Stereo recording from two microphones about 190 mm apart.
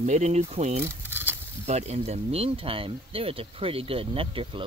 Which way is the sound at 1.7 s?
35° right (ahead or behind).